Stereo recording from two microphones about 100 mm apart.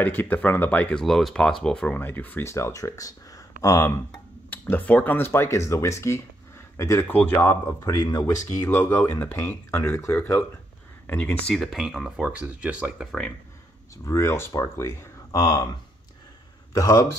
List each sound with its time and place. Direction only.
0.0 s speech: 20° left (ahead or behind)
2.0 s speech: 20° left (ahead or behind)
7.1 s speech: 20° left (ahead or behind)
7.3 s speech: 30° left (ahead or behind)
8.6 s speech: 25° left (ahead or behind)
11.4 s speech: 5° left (ahead or behind)
12.2 s speech: 15° right (ahead or behind)
13.0 s speech: 5° left (ahead or behind)
14.0 s speech: 25° left (ahead or behind)
16.7 s speech: 35° left (ahead or behind)